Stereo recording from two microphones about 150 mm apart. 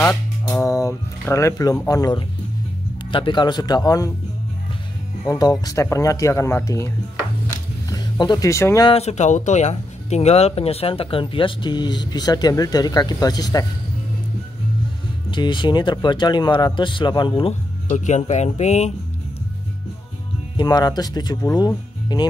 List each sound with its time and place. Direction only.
0.5 s speech: 20° left (ahead or behind)
5.2 s speech: 25° left (ahead or behind)
7.9 s speech: 25° left (ahead or behind)
8.8 s speech: 45° left (ahead or behind); by 13.7 s 25° left (ahead or behind)
15.3 s speech: 30° left (ahead or behind); by 18.9 s 50° left (ahead or behind)
20.5 s speech: 25° left (ahead or behind)